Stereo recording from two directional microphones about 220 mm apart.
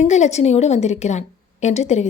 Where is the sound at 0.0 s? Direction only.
30° left (ahead or behind).